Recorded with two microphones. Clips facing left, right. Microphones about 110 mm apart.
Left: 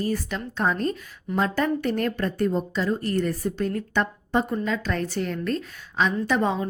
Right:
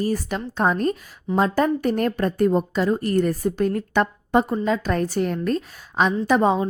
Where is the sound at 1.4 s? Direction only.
35° right (ahead or behind); by 4.4 s 50° right (ahead or behind).